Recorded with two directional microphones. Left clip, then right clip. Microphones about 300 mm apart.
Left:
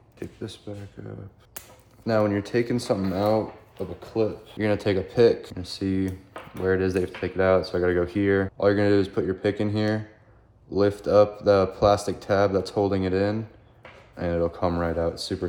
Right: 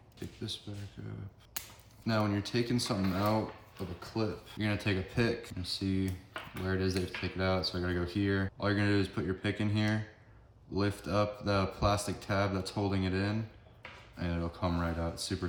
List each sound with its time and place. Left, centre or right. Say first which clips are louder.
2.0 s speech: left 10 dB; centre
4.5 s speech: left 11 dB; centre